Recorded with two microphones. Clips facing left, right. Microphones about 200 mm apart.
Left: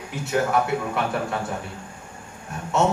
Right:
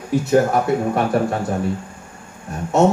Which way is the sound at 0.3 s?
40° right (ahead or behind).